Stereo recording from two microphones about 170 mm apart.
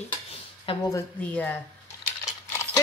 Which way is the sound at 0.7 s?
30° left (ahead or behind).